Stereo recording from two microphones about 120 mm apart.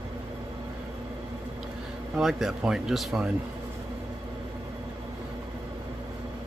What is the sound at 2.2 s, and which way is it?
Speech, 5° right (ahead or behind).